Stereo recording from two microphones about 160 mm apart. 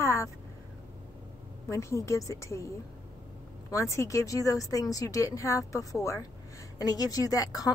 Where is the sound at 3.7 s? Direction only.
20° left (ahead or behind).